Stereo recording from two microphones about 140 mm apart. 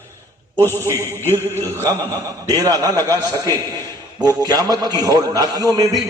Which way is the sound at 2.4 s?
25° right (ahead or behind).